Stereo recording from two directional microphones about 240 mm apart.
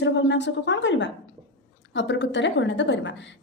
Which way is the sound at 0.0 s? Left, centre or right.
Left.